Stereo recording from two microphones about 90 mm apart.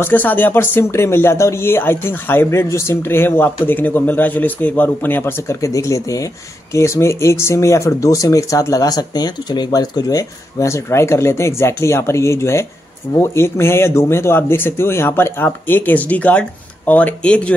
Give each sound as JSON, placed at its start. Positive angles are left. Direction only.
{"t": 0.0, "sound": "speech", "side_deg": 20}